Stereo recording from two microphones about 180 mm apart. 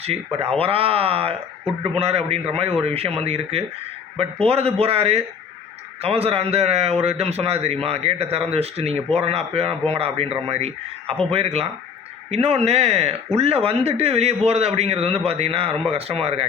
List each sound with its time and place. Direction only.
0.0 s speech: 35° right (ahead or behind)